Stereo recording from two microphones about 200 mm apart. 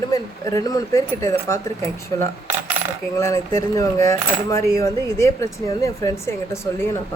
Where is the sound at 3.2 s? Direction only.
15° left (ahead or behind).